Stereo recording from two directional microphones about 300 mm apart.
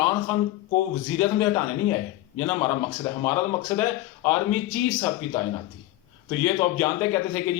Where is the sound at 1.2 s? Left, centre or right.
Centre.